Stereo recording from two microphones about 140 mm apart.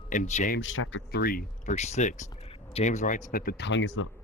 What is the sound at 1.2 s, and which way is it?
Speech, 90° left.